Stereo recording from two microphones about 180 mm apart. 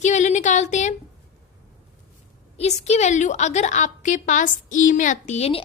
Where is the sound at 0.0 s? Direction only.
40° left (ahead or behind).